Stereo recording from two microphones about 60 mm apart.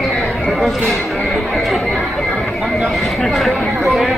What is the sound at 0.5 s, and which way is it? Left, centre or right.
Speech, centre.